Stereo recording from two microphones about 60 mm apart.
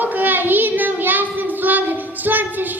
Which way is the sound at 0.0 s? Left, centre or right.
Right.